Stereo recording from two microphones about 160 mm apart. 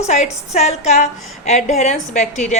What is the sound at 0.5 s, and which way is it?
A woman's voice, 45° left (ahead or behind).